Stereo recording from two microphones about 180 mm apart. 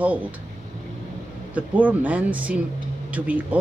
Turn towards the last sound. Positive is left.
turn(degrees=-10)  # may be behind; listen again after turning